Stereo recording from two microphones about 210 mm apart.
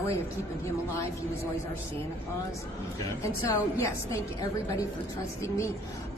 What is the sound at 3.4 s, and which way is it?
Speech, 15° left (ahead or behind).